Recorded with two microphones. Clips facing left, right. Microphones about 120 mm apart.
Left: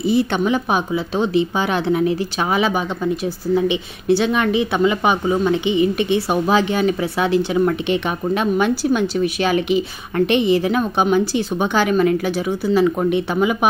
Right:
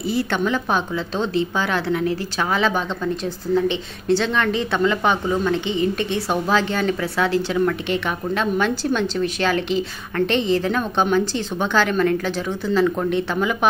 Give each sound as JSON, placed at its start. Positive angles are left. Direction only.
{"t": 0.0, "sound": "speech", "side_deg": 15}